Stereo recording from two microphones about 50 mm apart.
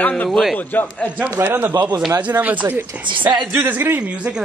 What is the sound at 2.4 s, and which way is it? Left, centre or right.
Speech, right.